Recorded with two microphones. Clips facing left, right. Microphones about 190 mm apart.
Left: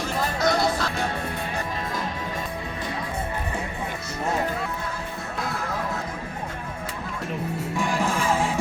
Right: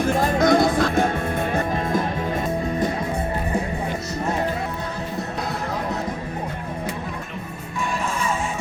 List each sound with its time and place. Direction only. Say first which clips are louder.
0.0 s music: right 6 dB; 50° right (ahead or behind)